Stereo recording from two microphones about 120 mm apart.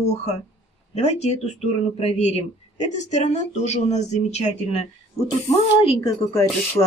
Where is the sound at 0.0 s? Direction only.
65° left (ahead or behind).